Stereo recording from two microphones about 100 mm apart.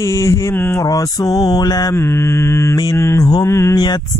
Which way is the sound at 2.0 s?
25° left (ahead or behind).